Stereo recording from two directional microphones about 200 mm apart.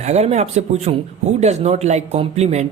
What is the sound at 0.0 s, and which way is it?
Speech, 35° right (ahead or behind).